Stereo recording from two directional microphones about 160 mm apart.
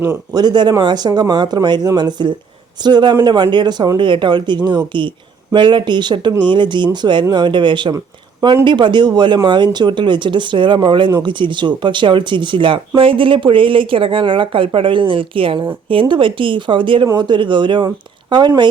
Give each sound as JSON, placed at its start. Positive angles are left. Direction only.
{"t": 0.0, "sound": "speech", "side_deg": -20}